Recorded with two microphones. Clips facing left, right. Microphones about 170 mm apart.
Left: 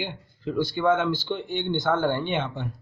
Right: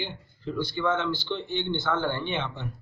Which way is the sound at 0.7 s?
50° left (ahead or behind).